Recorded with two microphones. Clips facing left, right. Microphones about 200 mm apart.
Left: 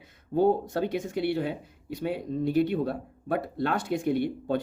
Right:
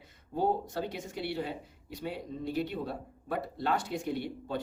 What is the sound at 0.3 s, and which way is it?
Speech, 55° left (ahead or behind).